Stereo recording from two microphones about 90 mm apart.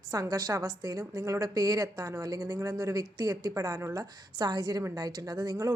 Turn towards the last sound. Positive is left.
turn(degrees=-45)  # may be behind; listen again after turning